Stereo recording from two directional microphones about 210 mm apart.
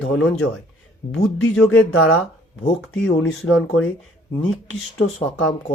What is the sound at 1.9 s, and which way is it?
Speech, 75° left (ahead or behind).